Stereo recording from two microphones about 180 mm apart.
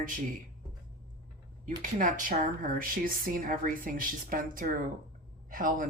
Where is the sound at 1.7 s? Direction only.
50° right (ahead or behind).